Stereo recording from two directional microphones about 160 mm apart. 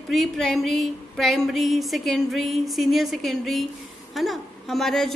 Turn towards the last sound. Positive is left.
turn(degrees=0)  # may be behind; listen again after turning